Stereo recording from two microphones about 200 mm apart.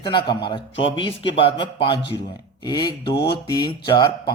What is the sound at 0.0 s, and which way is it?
Speech, 20° left (ahead or behind).